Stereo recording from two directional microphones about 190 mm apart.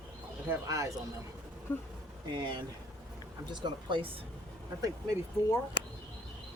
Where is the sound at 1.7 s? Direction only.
10° left (ahead or behind).